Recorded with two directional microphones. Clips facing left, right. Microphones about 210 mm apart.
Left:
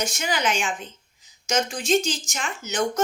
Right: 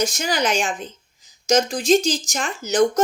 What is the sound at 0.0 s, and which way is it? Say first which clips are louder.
A woman's voice: right 4 dB; 35° right (ahead or behind).